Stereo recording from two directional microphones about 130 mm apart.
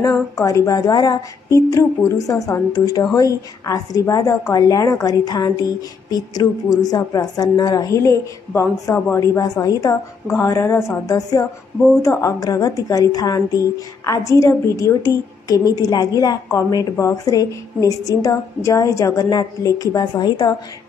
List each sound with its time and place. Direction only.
0.4 s a woman's voice: 25° left (ahead or behind)